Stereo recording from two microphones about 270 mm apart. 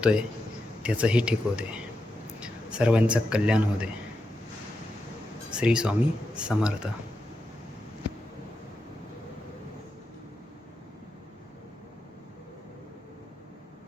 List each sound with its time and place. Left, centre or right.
0.0 s a man's voice: centre
5.5 s speech: centre